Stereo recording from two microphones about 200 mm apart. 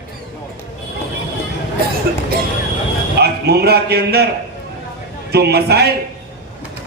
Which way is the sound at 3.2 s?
55° right (ahead or behind).